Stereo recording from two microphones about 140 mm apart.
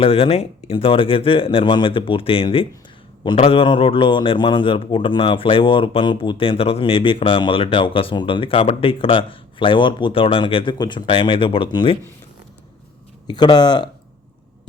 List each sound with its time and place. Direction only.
0.0 s a man's voice: 40° left (ahead or behind)
13.2 s a man's voice: 30° left (ahead or behind)